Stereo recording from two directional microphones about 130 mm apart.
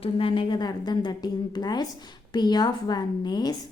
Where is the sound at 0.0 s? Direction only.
45° left (ahead or behind).